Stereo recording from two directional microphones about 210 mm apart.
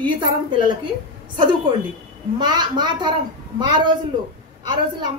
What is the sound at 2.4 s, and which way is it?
Speech, 20° right (ahead or behind).